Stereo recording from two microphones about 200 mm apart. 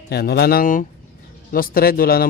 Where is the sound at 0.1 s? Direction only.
55° left (ahead or behind).